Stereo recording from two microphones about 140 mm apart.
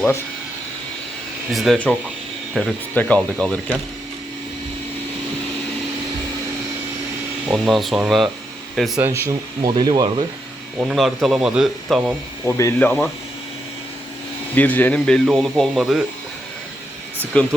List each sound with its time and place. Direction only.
1.5 s speech: centre (ahead or behind)
2.9 s speech: 15° left (ahead or behind)
7.4 s speech: centre (ahead or behind)
9.0 s speech: 20° right (ahead or behind)
9.7 s speech: 30° right (ahead or behind)
10.8 s speech: 5° right (ahead or behind)
12.5 s speech: 20° left (ahead or behind)
12.8 s speech: 10° left (ahead or behind)
14.5 s speech: 10° left (ahead or behind)
17.3 s speech: 5° left (ahead or behind)